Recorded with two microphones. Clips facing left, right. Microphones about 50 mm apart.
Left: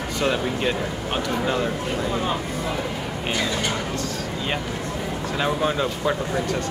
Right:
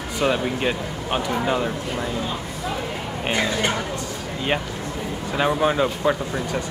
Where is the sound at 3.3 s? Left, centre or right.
Right.